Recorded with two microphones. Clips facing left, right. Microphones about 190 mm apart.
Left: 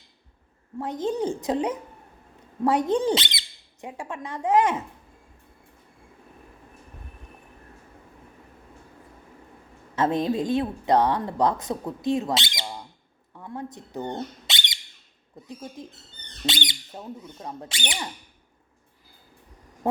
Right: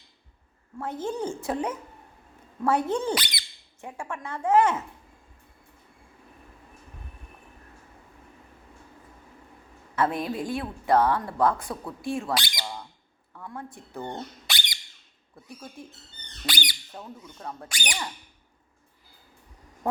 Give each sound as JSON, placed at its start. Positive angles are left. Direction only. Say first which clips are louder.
{"t": 0.8, "sound": "a woman's voice", "louder": "left 4 dB", "side_deg": 15}
{"t": 9.9, "sound": "a woman's voice", "louder": "left 3 dB", "side_deg": 20}